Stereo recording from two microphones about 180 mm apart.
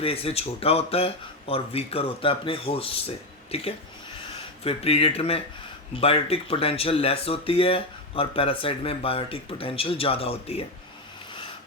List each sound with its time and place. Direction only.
0.0 s speech: 35° left (ahead or behind)